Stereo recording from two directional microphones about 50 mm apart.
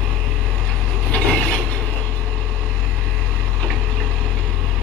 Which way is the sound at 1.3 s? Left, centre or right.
Centre.